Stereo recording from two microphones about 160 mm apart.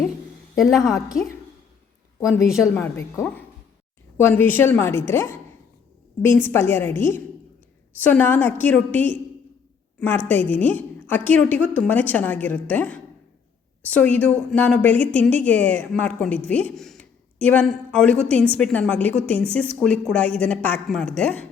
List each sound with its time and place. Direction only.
0.5 s a woman's voice: centre (ahead or behind)
0.8 s a woman's voice: 20° left (ahead or behind)
2.2 s a woman's voice: 20° left (ahead or behind)